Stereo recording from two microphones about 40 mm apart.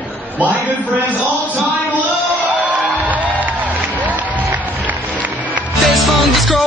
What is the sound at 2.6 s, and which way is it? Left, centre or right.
Music, right.